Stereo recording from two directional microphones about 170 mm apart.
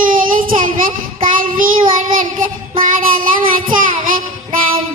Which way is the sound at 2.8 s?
55° right (ahead or behind).